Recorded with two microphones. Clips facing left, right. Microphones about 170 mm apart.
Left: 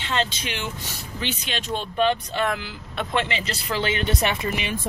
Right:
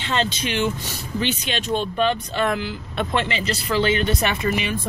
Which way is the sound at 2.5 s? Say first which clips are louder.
Right 5 dB; 5° left (ahead or behind).